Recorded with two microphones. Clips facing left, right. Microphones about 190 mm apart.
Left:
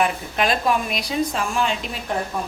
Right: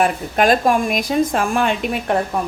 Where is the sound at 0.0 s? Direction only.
50° right (ahead or behind).